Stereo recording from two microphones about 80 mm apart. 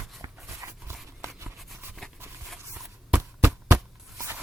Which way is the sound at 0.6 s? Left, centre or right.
Right.